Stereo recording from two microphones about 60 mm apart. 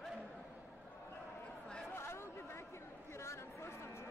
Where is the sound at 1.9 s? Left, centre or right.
Left.